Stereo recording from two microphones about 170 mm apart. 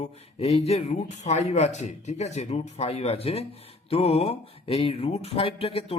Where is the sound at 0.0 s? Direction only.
35° left (ahead or behind).